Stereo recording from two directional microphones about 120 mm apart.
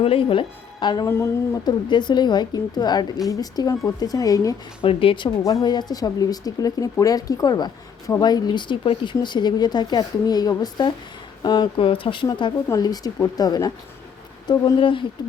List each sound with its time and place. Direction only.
0.0 s speech: 50° left (ahead or behind)
1.0 s speech: 25° left (ahead or behind)
1.6 s speech: 40° left (ahead or behind)
4.8 s speech: 50° left (ahead or behind)
5.4 s speech: 35° left (ahead or behind)
12.6 s speech: 30° left (ahead or behind)
14.8 s speech: 45° left (ahead or behind)